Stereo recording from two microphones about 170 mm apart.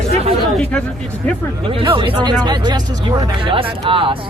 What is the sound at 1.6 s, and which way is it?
Speech, 30° right (ahead or behind).